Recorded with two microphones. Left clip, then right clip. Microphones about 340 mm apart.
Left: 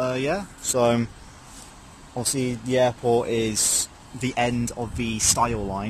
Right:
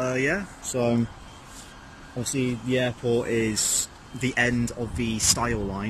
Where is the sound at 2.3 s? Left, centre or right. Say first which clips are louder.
Left 1 dB; centre.